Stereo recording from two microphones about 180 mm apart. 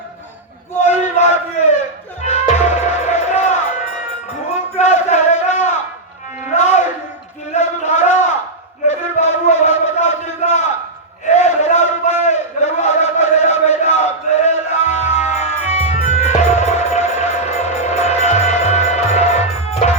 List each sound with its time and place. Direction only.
0.9 s battle cry: 40° left (ahead or behind)
2.2 s music: 40° left (ahead or behind)
4.8 s crowd: 40° left (ahead or behind)
6.6 s a sound: 40° left (ahead or behind)